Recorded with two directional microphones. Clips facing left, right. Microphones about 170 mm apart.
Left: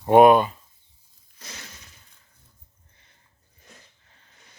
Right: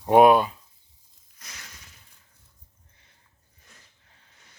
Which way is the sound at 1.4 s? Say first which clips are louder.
Left 5 dB; 30° left (ahead or behind).